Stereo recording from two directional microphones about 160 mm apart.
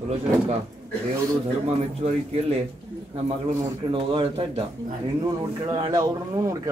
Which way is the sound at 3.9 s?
35° right (ahead or behind).